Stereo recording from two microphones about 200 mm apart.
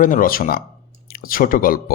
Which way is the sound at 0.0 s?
45° left (ahead or behind).